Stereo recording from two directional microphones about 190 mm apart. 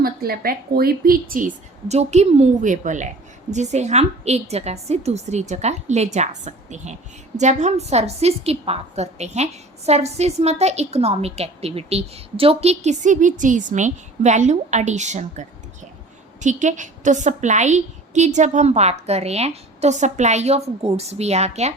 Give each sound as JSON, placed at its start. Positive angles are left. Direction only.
{"t": 0.0, "sound": "a woman's voice", "side_deg": -50}